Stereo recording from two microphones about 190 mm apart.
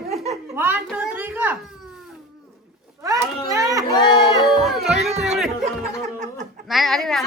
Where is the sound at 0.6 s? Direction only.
10° right (ahead or behind).